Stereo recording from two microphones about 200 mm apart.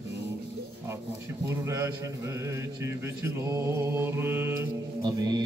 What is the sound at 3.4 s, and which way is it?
Mantra, 15° right (ahead or behind).